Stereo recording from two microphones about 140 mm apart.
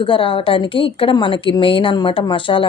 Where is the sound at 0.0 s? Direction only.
40° left (ahead or behind).